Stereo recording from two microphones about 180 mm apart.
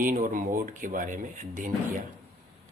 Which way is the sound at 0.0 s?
50° right (ahead or behind).